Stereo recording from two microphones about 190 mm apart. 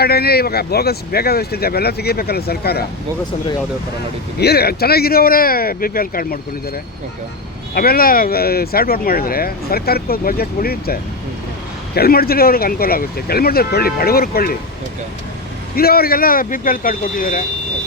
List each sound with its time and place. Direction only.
0.0 s speech: 55° left (ahead or behind)
4.4 s speech: 55° left (ahead or behind)
7.7 s speech: 50° left (ahead or behind)
15.7 s speech: 55° left (ahead or behind)